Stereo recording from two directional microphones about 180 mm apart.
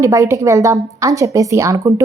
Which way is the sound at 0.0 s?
15° right (ahead or behind).